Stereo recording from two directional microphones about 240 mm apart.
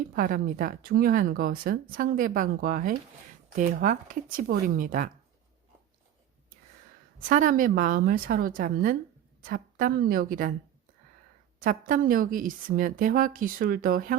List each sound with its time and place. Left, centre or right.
0.2 s speech: right
7.2 s speech: right
11.6 s speech: right